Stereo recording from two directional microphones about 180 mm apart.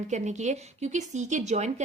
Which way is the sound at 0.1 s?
40° right (ahead or behind).